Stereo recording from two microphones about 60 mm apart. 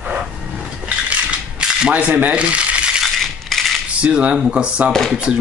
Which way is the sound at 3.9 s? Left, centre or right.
Centre.